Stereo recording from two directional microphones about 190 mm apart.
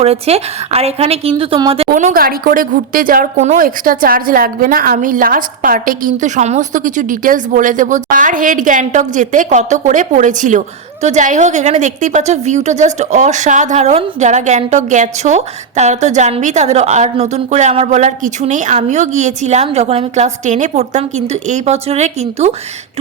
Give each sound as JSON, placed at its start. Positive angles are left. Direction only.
{"t": 0.0, "sound": "a woman's voice", "side_deg": -35}
{"t": 1.9, "sound": "a woman's voice", "side_deg": -45}